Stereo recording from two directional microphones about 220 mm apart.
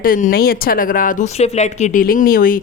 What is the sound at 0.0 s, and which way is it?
A woman's voice, 40° left (ahead or behind).